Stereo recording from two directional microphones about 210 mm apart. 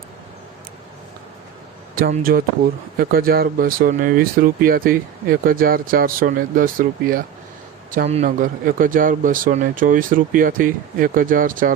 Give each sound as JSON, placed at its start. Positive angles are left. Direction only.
{"t": 2.0, "sound": "a man's voice", "side_deg": -45}